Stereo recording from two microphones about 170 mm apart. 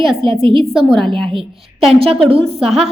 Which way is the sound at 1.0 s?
30° right (ahead or behind).